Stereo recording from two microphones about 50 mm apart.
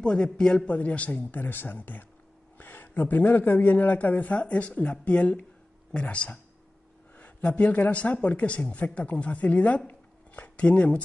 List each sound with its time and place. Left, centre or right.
0.0 s a man's voice: centre
0.7 s speech: left
9.8 s a sound: left